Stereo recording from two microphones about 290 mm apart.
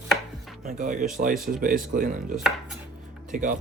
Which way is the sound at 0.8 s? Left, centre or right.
Right.